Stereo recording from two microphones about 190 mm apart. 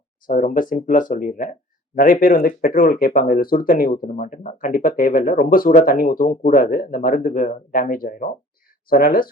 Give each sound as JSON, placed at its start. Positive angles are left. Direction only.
{"t": 0.3, "sound": "speech", "side_deg": 45}